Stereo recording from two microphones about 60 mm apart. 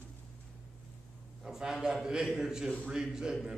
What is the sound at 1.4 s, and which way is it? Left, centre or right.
A man's voice, centre.